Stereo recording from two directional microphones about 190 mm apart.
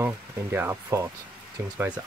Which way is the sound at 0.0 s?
10° right (ahead or behind).